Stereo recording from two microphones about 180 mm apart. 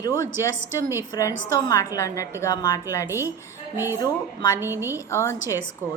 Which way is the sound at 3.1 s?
15° right (ahead or behind).